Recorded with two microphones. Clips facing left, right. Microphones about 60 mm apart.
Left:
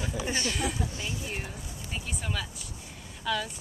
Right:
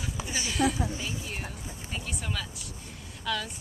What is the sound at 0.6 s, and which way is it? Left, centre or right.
Speech, right.